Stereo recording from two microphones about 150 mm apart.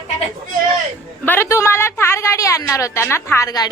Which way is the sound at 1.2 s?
15° left (ahead or behind).